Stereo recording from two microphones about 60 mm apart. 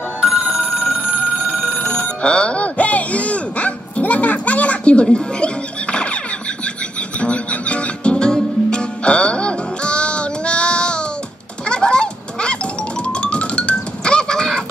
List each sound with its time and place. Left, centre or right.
0.2 s telephone bell ringing: centre
0.9 s telephone bell ringing: right
1.7 s telephone bell ringing: centre
5.0 s squeal: centre
7.2 s music: left
11.6 s a sound: centre
13.0 s music: centre